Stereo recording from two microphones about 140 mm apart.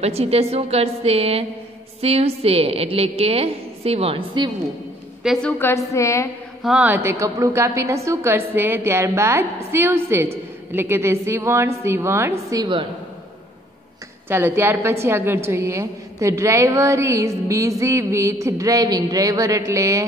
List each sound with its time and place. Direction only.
0.0 s a woman's voice: 45° right (ahead or behind)
5.2 s a woman's voice: centre (ahead or behind)
5.6 s a woman's voice: 20° left (ahead or behind)
6.6 s a woman's voice: 5° right (ahead or behind)
14.3 s a woman's voice: 15° right (ahead or behind)